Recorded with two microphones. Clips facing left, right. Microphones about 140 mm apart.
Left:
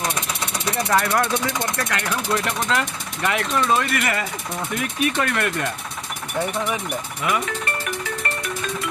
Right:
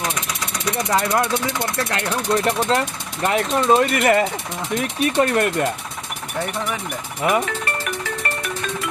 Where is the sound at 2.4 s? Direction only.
30° right (ahead or behind).